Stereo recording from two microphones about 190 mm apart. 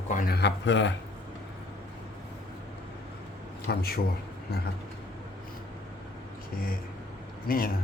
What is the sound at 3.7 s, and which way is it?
Speech, 55° left (ahead or behind).